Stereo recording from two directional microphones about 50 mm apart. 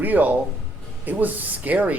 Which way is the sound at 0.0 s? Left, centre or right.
Right.